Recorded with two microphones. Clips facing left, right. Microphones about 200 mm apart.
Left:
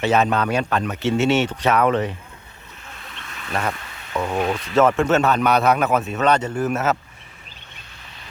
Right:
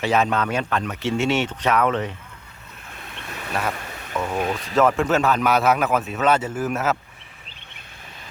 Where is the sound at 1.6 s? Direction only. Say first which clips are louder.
Left 2 dB; 35° left (ahead or behind).